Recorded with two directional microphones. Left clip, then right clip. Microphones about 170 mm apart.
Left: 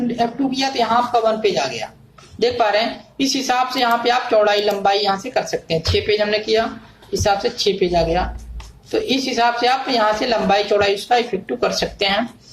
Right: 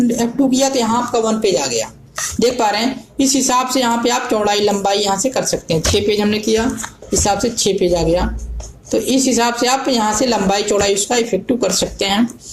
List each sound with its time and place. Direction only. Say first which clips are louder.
0.2 s speech: right 4 dB; 40° right (ahead or behind)